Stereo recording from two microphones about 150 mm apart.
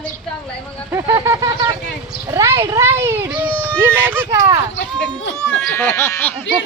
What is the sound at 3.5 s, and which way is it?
Speech, 10° left (ahead or behind).